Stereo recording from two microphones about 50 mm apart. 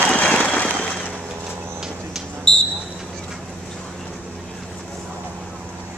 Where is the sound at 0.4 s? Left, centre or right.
Left.